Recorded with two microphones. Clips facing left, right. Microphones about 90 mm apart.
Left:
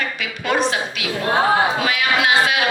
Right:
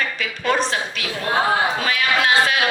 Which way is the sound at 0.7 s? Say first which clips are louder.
Left 2 dB; 35° right (ahead or behind).